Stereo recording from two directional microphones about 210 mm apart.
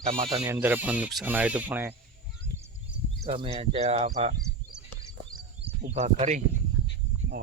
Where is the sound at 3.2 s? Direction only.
30° right (ahead or behind).